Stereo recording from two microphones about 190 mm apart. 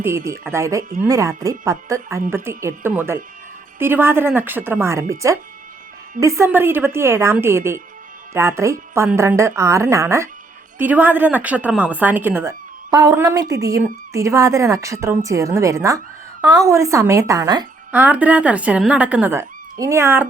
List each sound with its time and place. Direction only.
0.0 s a woman's voice: 15° right (ahead or behind)
17.9 s a woman's voice: 10° right (ahead or behind)